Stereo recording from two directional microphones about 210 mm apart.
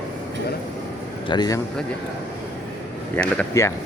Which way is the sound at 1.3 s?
20° left (ahead or behind).